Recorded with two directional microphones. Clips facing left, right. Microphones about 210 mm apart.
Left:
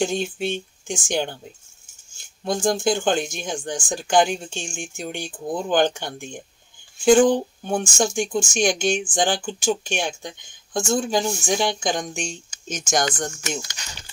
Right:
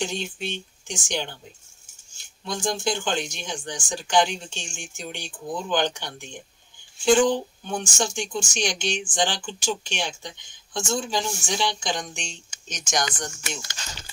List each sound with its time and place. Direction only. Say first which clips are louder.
0.0 s speech: left 6 dB; 50° left (ahead or behind)
2.4 s speech: left 6 dB; 50° left (ahead or behind)
13.6 s speech: left 5 dB; 15° left (ahead or behind)